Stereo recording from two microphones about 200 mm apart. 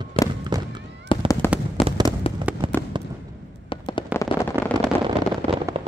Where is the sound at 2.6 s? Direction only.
25° right (ahead or behind).